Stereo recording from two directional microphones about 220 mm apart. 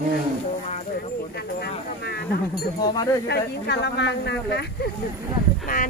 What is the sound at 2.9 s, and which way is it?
Speech, 15° left (ahead or behind).